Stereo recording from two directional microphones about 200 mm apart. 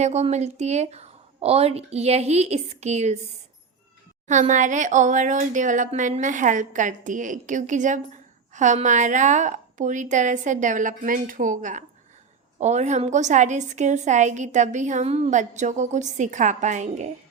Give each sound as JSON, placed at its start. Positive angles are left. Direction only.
{"t": 0.0, "sound": "a woman's voice", "side_deg": -35}
{"t": 4.3, "sound": "a woman's voice", "side_deg": -40}